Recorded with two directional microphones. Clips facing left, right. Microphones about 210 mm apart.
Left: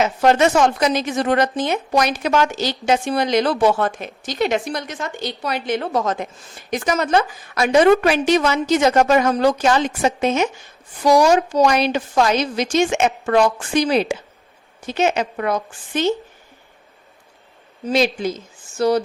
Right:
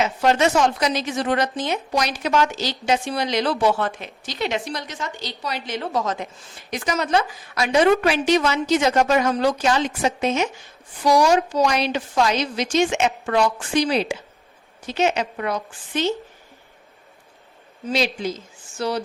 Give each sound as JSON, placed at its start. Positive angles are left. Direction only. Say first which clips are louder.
{"t": 0.0, "sound": "speech", "louder": "left 3 dB", "side_deg": 50}
{"t": 17.8, "sound": "speech", "louder": "left 4 dB", "side_deg": 50}